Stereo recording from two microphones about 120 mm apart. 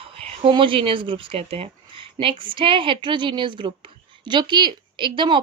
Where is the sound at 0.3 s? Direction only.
45° right (ahead or behind).